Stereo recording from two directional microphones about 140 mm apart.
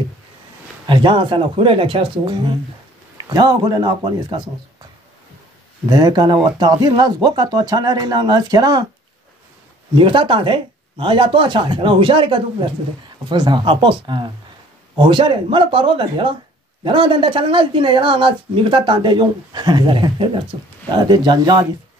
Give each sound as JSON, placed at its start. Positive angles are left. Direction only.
{"t": 0.8, "sound": "a woman's voice", "side_deg": -35}
{"t": 5.9, "sound": "speech", "side_deg": -30}
{"t": 9.9, "sound": "a woman's voice", "side_deg": -35}
{"t": 20.5, "sound": "speech", "side_deg": -45}
{"t": 20.9, "sound": "a woman's voice", "side_deg": -30}